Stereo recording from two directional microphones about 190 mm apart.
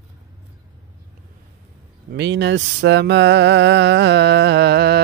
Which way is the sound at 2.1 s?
70° right (ahead or behind).